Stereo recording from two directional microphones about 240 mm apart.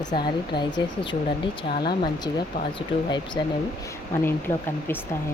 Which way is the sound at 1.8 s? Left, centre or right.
Centre.